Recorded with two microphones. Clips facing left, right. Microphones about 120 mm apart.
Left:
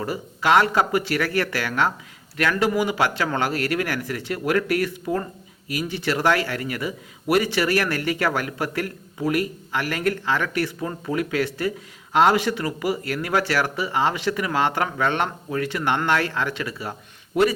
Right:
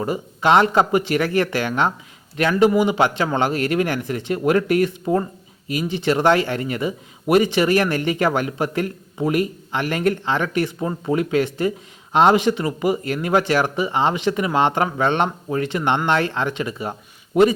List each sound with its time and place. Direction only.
0.0 s speech: 25° right (ahead or behind)